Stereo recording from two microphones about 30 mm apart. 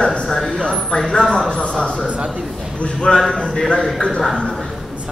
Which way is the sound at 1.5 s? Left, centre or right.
Left.